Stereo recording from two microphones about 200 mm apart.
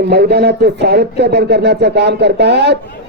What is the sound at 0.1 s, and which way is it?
A man's voice, 55° right (ahead or behind).